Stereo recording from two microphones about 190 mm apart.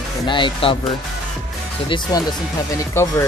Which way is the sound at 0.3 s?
25° left (ahead or behind).